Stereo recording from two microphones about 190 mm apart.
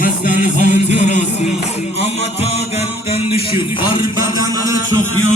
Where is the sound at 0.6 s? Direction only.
40° left (ahead or behind).